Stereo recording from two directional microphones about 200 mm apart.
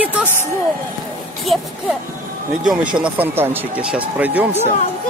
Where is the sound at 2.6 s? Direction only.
5° right (ahead or behind).